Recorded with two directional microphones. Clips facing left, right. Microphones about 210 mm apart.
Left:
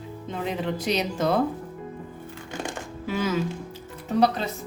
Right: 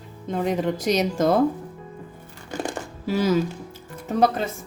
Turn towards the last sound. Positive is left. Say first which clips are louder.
# right 1 dB
turn(degrees=-50)  # may be behind; listen again after turning